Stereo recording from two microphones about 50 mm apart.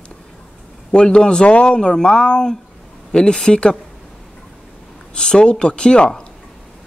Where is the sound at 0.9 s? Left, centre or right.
Centre.